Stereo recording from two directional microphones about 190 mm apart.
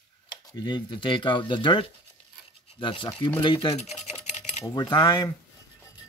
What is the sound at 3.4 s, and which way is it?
Cutlery, 25° left (ahead or behind).